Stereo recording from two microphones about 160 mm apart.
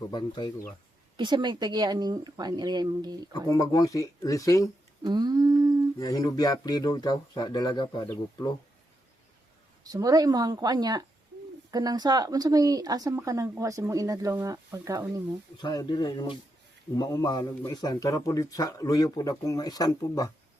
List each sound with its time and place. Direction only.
0.1 s speech: 30° left (ahead or behind)
1.1 s speech: 30° right (ahead or behind)
3.5 s speech: 25° left (ahead or behind)
5.0 s speech: 25° right (ahead or behind)
6.0 s speech: 20° left (ahead or behind)
9.8 s speech: 20° right (ahead or behind)
15.5 s speech: 25° left (ahead or behind)